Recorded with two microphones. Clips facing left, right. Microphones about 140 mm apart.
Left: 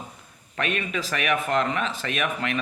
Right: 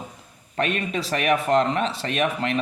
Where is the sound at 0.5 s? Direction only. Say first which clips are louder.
Right 3 dB; 35° right (ahead or behind).